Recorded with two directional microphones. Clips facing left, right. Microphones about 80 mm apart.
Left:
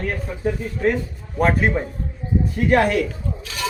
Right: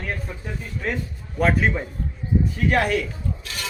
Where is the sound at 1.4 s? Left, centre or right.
Left.